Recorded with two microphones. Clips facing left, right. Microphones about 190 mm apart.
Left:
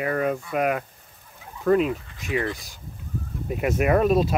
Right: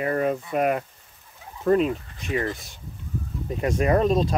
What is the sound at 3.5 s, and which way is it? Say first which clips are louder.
Speech: even; 10° left (ahead or behind).